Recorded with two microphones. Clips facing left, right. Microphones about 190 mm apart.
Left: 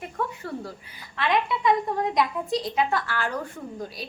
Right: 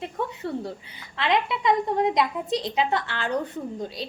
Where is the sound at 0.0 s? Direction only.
25° right (ahead or behind).